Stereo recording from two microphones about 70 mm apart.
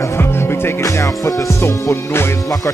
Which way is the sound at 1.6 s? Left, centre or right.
Left.